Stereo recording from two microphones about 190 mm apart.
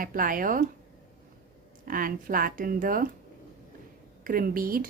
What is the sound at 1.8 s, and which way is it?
Speech, 45° right (ahead or behind).